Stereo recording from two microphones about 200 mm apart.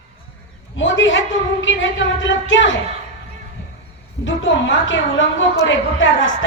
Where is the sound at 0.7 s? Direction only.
70° left (ahead or behind).